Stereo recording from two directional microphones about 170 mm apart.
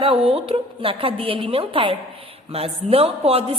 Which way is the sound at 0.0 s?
35° right (ahead or behind).